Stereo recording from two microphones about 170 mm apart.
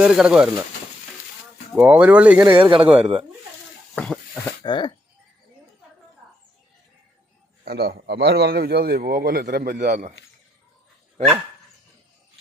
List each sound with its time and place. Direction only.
0.0 s speech: 5° right (ahead or behind)
1.7 s speech: 10° right (ahead or behind)
3.9 s a sound: 5° left (ahead or behind)
4.6 s speech: 30° left (ahead or behind)
7.6 s a man's voice: 65° right (ahead or behind); by 10.1 s 45° right (ahead or behind)